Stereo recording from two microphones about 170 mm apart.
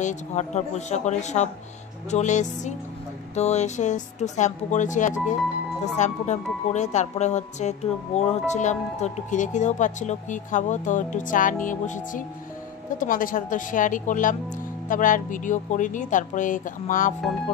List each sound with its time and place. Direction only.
0.0 s speech: 45° left (ahead or behind)